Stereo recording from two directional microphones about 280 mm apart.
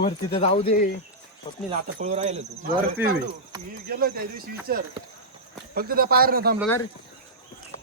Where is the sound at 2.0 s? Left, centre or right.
Right.